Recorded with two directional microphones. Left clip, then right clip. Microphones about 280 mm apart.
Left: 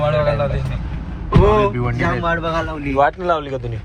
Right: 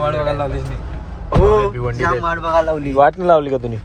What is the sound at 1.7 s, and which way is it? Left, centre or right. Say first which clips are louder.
Speech: even; centre.